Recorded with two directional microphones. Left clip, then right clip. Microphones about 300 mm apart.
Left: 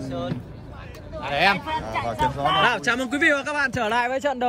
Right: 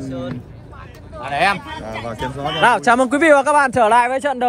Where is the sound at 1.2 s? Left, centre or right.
Centre.